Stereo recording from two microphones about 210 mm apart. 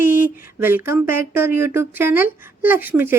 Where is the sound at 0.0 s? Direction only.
10° right (ahead or behind).